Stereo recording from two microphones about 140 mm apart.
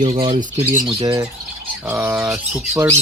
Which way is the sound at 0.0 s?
40° right (ahead or behind).